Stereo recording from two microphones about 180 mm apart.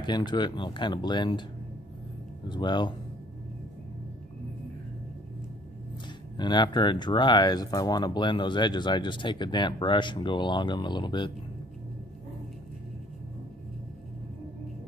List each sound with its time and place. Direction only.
0.0 s speech: 25° left (ahead or behind)
2.5 s speech: 25° left (ahead or behind)
6.3 s speech: 25° left (ahead or behind)